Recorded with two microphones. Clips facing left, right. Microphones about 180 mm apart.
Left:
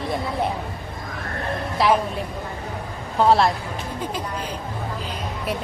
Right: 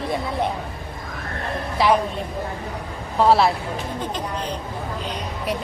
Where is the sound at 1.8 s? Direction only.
Centre (ahead or behind).